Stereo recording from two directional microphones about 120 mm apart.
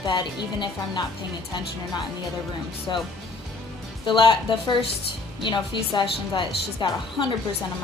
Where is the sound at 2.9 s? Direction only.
40° left (ahead or behind).